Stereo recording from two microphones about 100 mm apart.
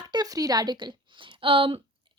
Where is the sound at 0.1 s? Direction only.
40° right (ahead or behind).